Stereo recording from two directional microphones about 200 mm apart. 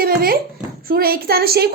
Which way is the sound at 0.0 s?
50° right (ahead or behind).